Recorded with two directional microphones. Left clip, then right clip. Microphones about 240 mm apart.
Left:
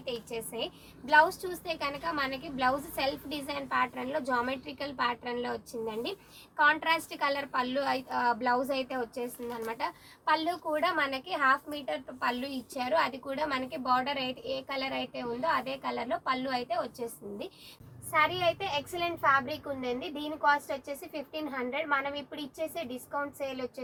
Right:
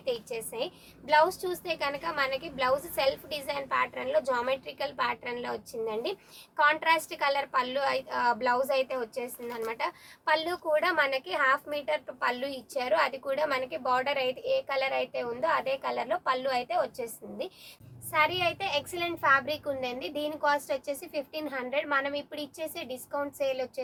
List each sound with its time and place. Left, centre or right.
0.0 s a woman's voice: right